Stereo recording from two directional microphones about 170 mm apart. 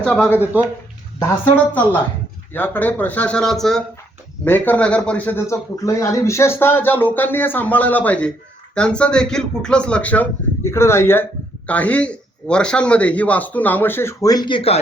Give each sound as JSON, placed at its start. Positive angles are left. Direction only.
{"t": 0.0, "sound": "speech", "side_deg": 10}
{"t": 0.3, "sound": "speech", "side_deg": -10}
{"t": 2.5, "sound": "speech", "side_deg": 10}